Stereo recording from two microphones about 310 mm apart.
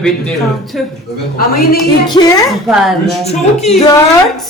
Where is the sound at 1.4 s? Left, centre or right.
Left.